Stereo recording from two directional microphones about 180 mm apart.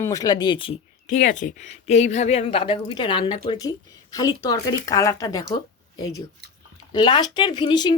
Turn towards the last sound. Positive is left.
turn(degrees=25)  # may be behind; listen again after turning